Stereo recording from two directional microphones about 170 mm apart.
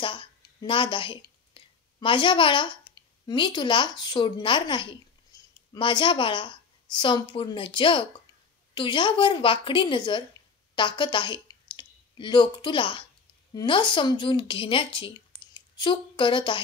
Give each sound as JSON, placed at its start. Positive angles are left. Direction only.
{"t": 0.0, "sound": "a woman's voice", "side_deg": 30}
{"t": 5.3, "sound": "a sound", "side_deg": 20}
{"t": 5.7, "sound": "a woman's voice", "side_deg": 30}